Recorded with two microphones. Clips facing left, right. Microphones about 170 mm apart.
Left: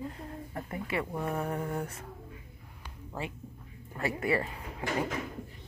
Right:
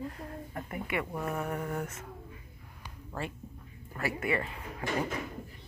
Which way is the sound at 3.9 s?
30° left (ahead or behind).